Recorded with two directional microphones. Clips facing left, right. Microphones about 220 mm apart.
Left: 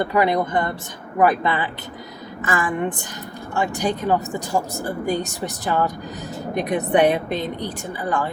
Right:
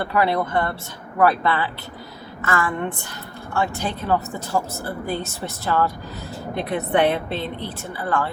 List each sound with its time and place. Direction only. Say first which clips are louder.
0.0 s speech: left 2 dB; 15° left (ahead or behind)